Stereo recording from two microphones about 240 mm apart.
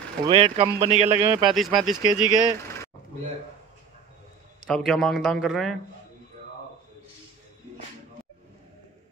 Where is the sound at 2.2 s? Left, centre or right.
Centre.